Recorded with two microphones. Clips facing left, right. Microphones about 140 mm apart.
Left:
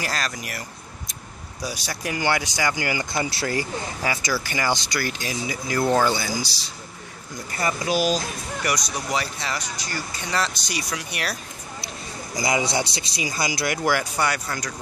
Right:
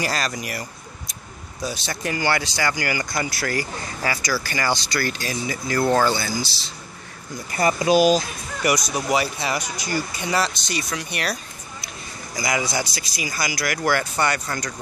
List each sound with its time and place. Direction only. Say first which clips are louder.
0.0 s speech: right 3 dB; centre (ahead or behind)
1.6 s speech: right 2 dB; 10° left (ahead or behind)
7.6 s speech: right 6 dB; 20° right (ahead or behind)
10.7 s speech: right 2 dB; 10° left (ahead or behind)
12.4 s speech: left 1 dB; 25° left (ahead or behind)
13.8 s speech: right 2 dB; 10° left (ahead or behind)